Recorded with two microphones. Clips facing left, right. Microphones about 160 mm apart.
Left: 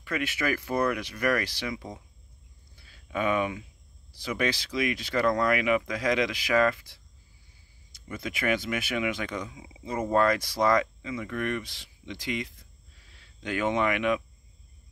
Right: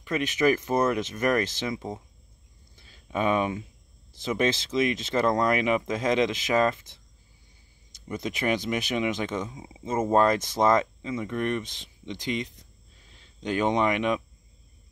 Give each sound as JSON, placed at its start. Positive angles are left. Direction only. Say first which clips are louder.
{"t": 0.0, "sound": "speech", "louder": "right 6 dB", "side_deg": -20}
{"t": 2.7, "sound": "a sound", "louder": "right 2 dB", "side_deg": -25}
{"t": 4.1, "sound": "speech", "louder": "right 4 dB", "side_deg": -25}
{"t": 9.5, "sound": "speech", "louder": "right 4 dB", "side_deg": -35}
{"t": 9.8, "sound": "speech", "louder": "right 2 dB", "side_deg": -20}